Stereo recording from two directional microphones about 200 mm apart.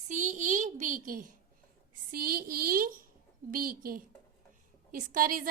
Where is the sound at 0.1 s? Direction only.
40° right (ahead or behind).